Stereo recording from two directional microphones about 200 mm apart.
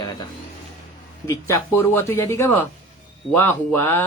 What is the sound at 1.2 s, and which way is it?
Speech, 15° left (ahead or behind).